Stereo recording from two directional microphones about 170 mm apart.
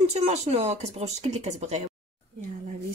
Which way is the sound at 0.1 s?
40° right (ahead or behind).